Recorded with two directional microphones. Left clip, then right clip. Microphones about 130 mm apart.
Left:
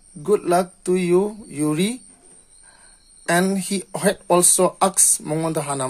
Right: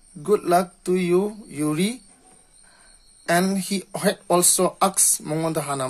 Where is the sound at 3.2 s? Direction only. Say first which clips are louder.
Left 1 dB; 25° left (ahead or behind).